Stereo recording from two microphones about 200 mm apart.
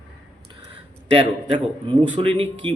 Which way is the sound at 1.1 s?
25° right (ahead or behind).